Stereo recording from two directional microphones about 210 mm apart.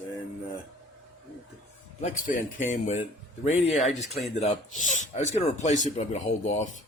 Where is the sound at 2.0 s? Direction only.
35° left (ahead or behind).